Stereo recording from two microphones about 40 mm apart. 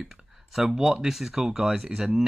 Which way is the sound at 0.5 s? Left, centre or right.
Centre.